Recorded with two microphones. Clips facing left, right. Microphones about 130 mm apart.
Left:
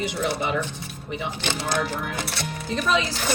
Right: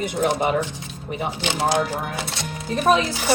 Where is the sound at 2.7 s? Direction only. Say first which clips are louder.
Right 5 dB; 50° right (ahead or behind).